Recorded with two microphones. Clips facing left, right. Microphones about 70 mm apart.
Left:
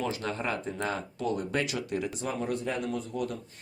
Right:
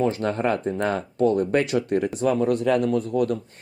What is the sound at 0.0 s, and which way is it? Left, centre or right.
Speech, right.